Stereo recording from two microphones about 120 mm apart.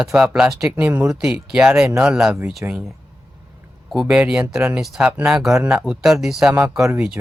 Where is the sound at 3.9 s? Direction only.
5° right (ahead or behind).